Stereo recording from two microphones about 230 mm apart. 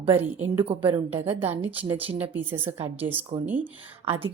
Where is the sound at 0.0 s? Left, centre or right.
Right.